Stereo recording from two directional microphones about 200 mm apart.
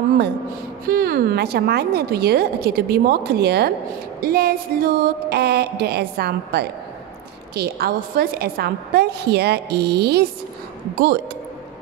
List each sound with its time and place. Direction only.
0.8 s a woman's voice: 50° right (ahead or behind)